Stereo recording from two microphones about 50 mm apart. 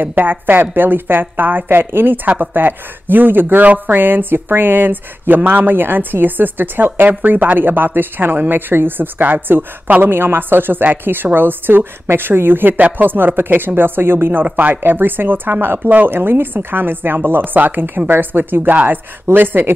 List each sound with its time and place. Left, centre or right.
0.0 s speech: right
2.2 s speech: right
14.4 s speech: right